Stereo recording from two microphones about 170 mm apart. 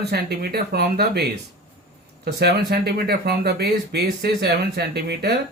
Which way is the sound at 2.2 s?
75° right (ahead or behind).